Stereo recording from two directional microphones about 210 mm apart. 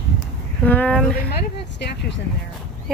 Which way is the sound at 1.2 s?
50° left (ahead or behind).